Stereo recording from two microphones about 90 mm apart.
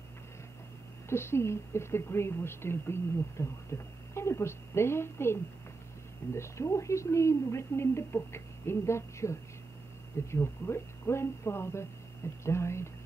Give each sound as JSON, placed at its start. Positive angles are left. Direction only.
{"t": 1.0, "sound": "a woman's voice", "side_deg": 30}